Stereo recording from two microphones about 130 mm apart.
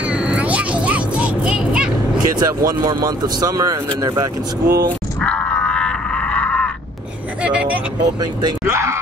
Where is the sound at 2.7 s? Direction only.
30° right (ahead or behind).